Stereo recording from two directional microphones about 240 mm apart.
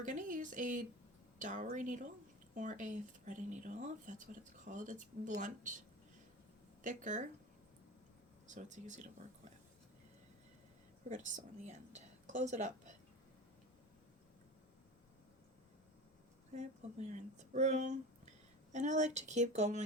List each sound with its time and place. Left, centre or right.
0.0 s a sound: right
1.4 s speech: right
6.8 s speech: right
8.4 s speech: right
11.9 s a woman's voice: right
16.6 s speech: right